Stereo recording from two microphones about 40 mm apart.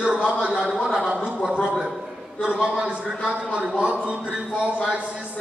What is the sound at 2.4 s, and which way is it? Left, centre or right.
A man's voice, right.